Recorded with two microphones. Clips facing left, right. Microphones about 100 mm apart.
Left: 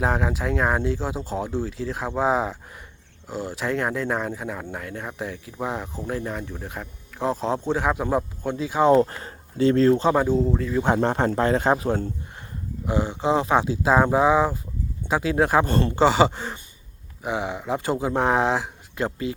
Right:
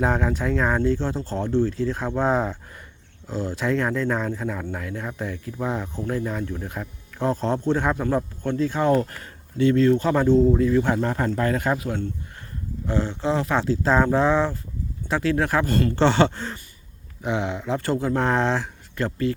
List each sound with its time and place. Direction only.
0.0 s speech: centre (ahead or behind)
9.0 s speech: 25° left (ahead or behind)
9.9 s speech: 20° left (ahead or behind)
10.2 s speech: 5° left (ahead or behind)
10.9 s speech: 30° left (ahead or behind)
12.8 s speech: 15° left (ahead or behind)
16.0 s speech: 5° left (ahead or behind)